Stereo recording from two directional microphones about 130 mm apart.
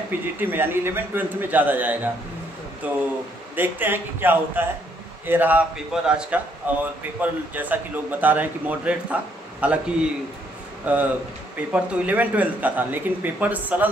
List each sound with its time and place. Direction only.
0.4 s a man's voice: 15° right (ahead or behind)
10.9 s a man's voice: 10° right (ahead or behind)